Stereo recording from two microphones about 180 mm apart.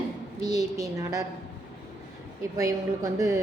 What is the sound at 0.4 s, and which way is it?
Speech, 20° right (ahead or behind).